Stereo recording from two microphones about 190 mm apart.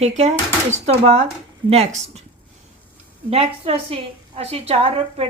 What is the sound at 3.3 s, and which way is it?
A woman's voice, 30° right (ahead or behind).